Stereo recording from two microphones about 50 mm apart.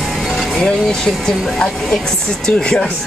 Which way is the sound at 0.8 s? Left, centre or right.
Centre.